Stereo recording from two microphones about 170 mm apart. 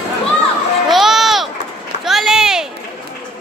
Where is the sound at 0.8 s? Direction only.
Centre (ahead or behind).